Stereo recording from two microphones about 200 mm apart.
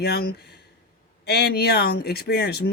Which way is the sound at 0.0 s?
50° left (ahead or behind).